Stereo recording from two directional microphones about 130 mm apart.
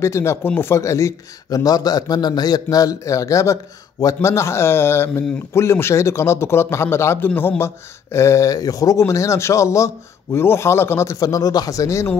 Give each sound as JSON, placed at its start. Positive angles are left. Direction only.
{"t": 0.0, "sound": "speech", "side_deg": 20}